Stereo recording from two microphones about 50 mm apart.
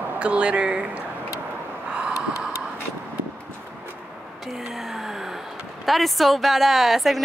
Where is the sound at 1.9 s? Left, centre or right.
Centre.